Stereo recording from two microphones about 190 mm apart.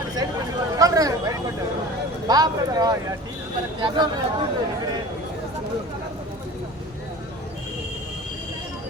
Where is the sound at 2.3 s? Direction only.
20° right (ahead or behind).